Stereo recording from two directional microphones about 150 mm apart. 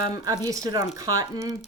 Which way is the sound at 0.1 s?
25° right (ahead or behind).